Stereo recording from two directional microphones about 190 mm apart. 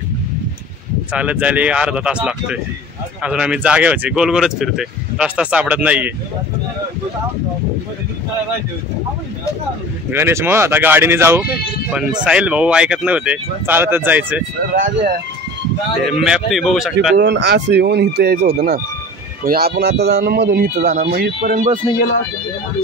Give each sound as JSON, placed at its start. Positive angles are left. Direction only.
{"t": 1.1, "sound": "speech", "side_deg": -5}
{"t": 10.1, "sound": "speech", "side_deg": -10}
{"t": 14.8, "sound": "speech", "side_deg": -40}
{"t": 16.1, "sound": "speech", "side_deg": 0}
{"t": 17.2, "sound": "a man's voice", "side_deg": -65}
{"t": 21.5, "sound": "speech", "side_deg": -40}